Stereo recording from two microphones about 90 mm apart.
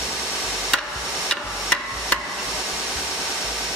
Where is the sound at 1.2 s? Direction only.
10° left (ahead or behind).